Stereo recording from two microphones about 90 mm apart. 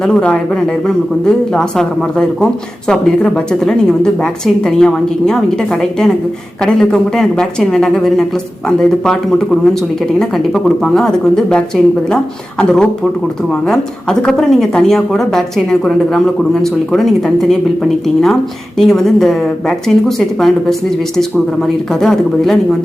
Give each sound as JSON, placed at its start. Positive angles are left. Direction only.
{"t": 0.0, "sound": "speech", "side_deg": 10}